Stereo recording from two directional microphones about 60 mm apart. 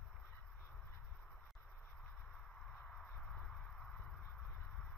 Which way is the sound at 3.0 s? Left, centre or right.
Centre.